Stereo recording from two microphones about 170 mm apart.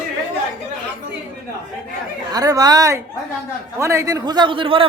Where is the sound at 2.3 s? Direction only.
20° right (ahead or behind).